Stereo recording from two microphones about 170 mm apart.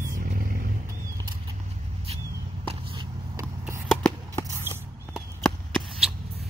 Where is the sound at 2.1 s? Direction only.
35° right (ahead or behind).